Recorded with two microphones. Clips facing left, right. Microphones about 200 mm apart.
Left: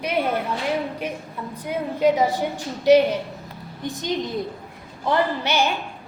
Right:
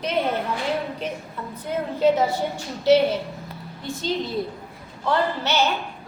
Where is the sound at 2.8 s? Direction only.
15° left (ahead or behind).